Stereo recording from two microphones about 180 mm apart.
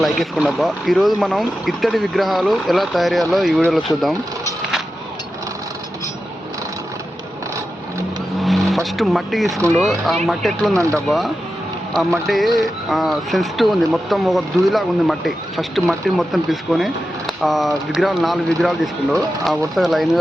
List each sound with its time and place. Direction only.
0.0 s speech: centre (ahead or behind)
8.3 s vehicle: centre (ahead or behind)
9.7 s speech: centre (ahead or behind)
10.8 s speech: 15° right (ahead or behind)
12.2 s speech: centre (ahead or behind)